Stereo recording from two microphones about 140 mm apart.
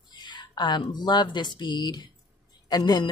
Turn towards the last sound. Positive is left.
turn(degrees=30)  # may be behind; listen again after turning